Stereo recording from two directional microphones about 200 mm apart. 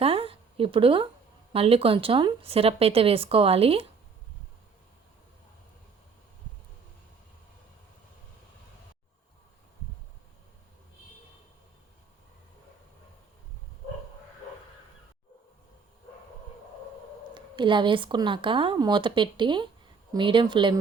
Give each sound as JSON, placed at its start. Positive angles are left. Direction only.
{"t": 0.0, "sound": "a sound", "side_deg": -30}
{"t": 1.5, "sound": "speech", "side_deg": -30}
{"t": 17.3, "sound": "speech", "side_deg": -25}